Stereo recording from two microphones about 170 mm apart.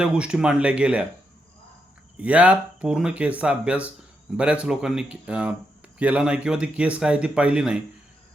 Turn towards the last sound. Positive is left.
turn(degrees=-5)  # may be behind; listen again after turning